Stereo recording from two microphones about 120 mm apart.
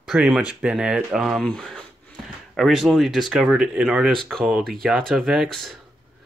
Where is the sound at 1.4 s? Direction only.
5° left (ahead or behind).